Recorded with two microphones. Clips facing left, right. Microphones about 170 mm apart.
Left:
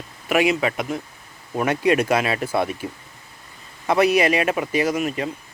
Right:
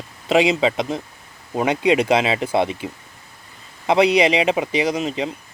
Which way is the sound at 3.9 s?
20° right (ahead or behind).